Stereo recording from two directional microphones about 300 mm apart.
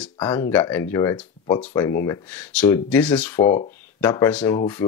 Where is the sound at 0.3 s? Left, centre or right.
Centre.